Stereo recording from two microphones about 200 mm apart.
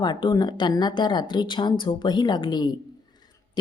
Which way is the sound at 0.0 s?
20° left (ahead or behind).